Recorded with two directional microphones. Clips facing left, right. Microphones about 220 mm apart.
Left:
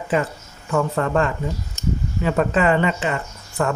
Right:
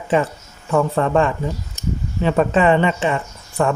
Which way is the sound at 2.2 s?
25° right (ahead or behind).